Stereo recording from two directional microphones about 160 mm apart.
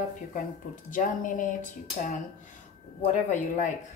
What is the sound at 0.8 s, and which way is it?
Speech, 55° left (ahead or behind).